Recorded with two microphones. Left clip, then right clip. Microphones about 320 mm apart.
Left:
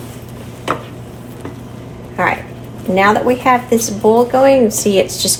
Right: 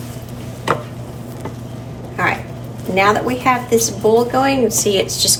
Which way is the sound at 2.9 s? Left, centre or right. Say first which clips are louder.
Left 3 dB; centre.